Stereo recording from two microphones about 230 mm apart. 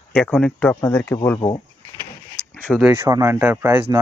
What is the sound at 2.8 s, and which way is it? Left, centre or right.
Speech, centre.